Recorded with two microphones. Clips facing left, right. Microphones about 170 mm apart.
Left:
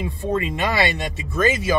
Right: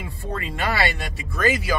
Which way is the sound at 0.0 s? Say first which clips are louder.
Left 8 dB; 20° left (ahead or behind).